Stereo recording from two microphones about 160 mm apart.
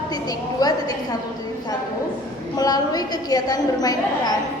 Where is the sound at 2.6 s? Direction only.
25° left (ahead or behind).